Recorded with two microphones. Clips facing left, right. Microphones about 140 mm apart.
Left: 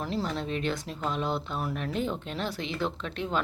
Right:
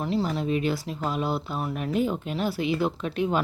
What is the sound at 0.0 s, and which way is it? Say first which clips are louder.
Speech: right 5 dB; centre (ahead or behind).